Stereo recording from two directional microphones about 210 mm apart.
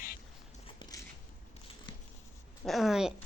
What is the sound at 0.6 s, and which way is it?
Biting, 20° left (ahead or behind).